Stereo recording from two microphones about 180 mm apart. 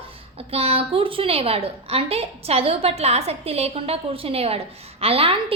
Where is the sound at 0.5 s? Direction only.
35° right (ahead or behind).